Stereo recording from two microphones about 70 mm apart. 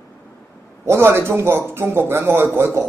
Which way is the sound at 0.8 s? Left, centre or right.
Right.